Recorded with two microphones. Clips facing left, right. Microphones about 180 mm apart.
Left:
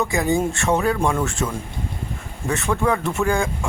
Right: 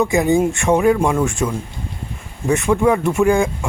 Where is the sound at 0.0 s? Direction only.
20° right (ahead or behind).